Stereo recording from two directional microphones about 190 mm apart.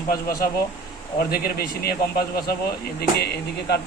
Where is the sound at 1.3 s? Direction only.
55° left (ahead or behind).